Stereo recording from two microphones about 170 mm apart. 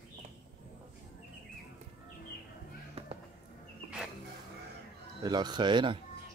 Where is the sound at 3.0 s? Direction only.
35° right (ahead or behind).